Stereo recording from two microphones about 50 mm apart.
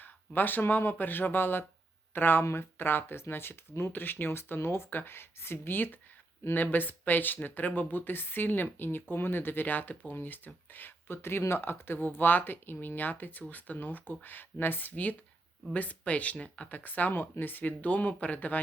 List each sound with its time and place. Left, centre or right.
0.0 s speech: left
2.4 s speech: left
11.2 s speech: left